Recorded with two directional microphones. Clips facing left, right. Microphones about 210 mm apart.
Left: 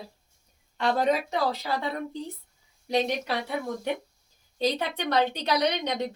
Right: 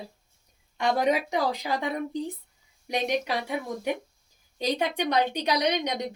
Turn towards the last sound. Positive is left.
turn(degrees=-15)  # may be behind; listen again after turning